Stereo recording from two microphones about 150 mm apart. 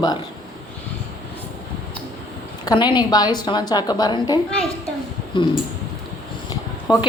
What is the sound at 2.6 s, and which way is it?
A woman's voice, 30° left (ahead or behind).